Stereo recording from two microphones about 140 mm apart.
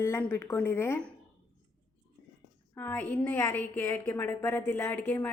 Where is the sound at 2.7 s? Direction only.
15° left (ahead or behind).